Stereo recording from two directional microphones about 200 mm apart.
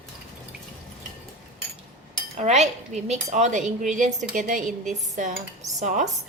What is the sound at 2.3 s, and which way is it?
A woman's voice, 35° right (ahead or behind).